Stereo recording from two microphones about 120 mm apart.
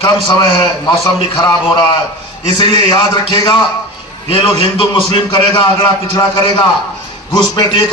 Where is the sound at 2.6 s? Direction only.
35° left (ahead or behind).